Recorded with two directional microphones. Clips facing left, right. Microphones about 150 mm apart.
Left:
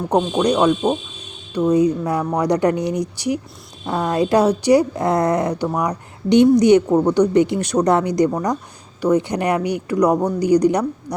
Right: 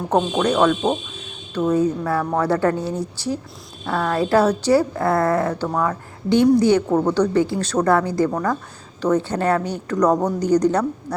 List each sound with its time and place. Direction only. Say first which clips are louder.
0.3 s a woman's voice: left 2 dB; 15° left (ahead or behind)